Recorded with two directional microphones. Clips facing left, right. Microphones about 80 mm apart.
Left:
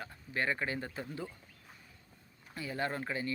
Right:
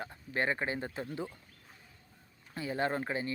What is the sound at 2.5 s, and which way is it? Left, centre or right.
Speech, right.